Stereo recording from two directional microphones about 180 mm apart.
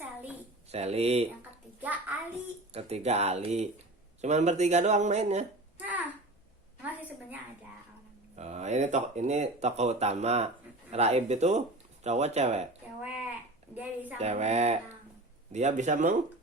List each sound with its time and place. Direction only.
0.7 s speech: 35° right (ahead or behind)
1.8 s child singing: 10° right (ahead or behind)
2.7 s speech: 35° right (ahead or behind)
5.7 s a sound: 10° right (ahead or behind)
8.4 s speech: 40° right (ahead or behind)
13.0 s a sound: 10° right (ahead or behind)
13.7 s a woman's voice: 10° right (ahead or behind)
14.2 s speech: 35° right (ahead or behind)